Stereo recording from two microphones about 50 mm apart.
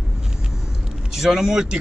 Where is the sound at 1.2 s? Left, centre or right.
Centre.